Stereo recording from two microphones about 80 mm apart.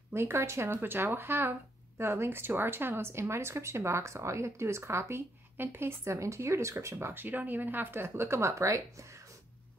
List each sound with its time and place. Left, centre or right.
0.1 s speech: right